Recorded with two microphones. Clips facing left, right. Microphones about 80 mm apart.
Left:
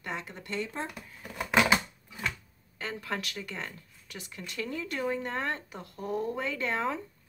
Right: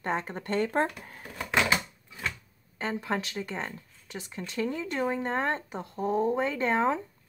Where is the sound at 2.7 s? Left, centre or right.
Right.